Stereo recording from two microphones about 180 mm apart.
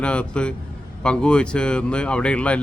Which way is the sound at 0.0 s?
5° left (ahead or behind).